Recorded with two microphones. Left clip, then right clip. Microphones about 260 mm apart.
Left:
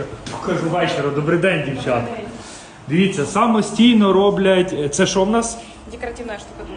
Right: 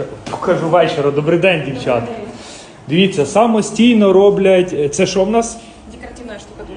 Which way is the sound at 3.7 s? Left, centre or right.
Right.